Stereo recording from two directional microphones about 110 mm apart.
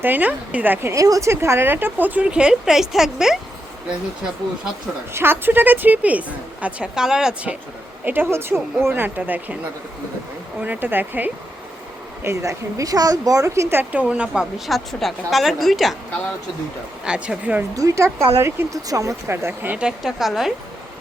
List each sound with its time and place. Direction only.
0.0 s a woman's voice: 15° right (ahead or behind)
5.1 s a woman's voice: 20° right (ahead or behind)
8.0 s a woman's voice: 15° right (ahead or behind)
10.6 s a woman's voice: 15° right (ahead or behind)
17.0 s a woman's voice: 10° right (ahead or behind)
17.7 s speech: 30° right (ahead or behind)
20.0 s a woman's voice: 5° right (ahead or behind)